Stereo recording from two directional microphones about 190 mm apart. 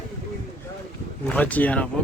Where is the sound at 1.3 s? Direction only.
10° left (ahead or behind).